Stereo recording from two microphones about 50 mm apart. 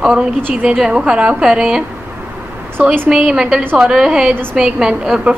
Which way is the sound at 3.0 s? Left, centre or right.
Centre.